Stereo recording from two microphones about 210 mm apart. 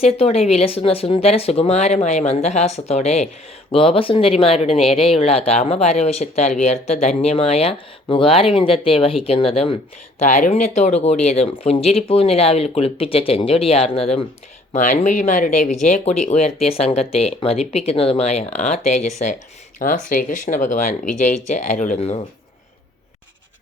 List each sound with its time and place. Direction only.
0.0 s speech: 30° left (ahead or behind)